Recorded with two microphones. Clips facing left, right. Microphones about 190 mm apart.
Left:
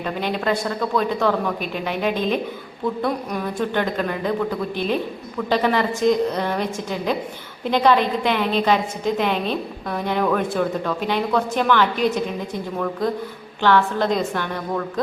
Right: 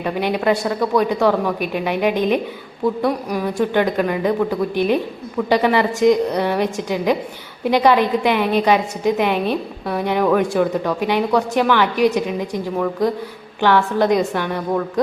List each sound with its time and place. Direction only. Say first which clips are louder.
0.0 s a woman's voice: right 4 dB; 15° right (ahead or behind)
13.6 s a woman's voice: right 2 dB; 15° right (ahead or behind)